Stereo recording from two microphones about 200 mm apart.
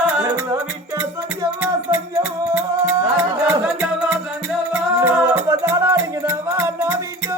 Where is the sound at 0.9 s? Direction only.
15° right (ahead or behind).